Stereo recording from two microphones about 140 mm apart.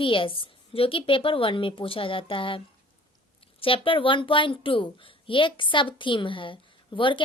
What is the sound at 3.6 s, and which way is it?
A woman's voice, 40° left (ahead or behind).